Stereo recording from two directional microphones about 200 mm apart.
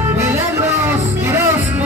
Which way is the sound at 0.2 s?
15° right (ahead or behind).